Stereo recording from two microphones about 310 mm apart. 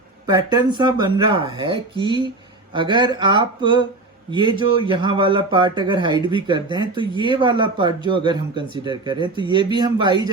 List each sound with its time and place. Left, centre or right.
0.3 s speech: centre